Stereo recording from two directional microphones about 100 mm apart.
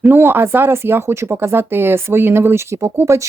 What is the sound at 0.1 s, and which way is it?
Speech, 20° right (ahead or behind).